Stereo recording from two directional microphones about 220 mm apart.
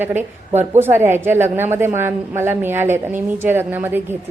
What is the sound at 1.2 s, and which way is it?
A woman's voice, 10° right (ahead or behind).